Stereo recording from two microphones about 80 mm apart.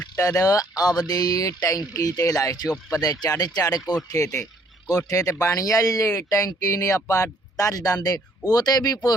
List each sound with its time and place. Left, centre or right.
0.2 s speech: left